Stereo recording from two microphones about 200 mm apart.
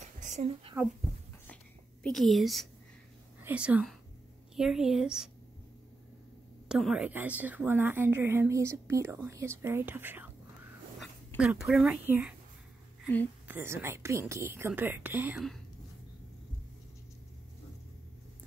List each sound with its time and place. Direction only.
0.0 s a sound: 35° right (ahead or behind)
2.0 s a woman's voice: centre (ahead or behind)
6.7 s a woman's voice: 5° right (ahead or behind)
13.5 s a woman's voice: 10° right (ahead or behind)